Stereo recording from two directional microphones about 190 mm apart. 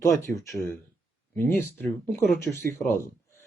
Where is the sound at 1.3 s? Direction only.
5° left (ahead or behind).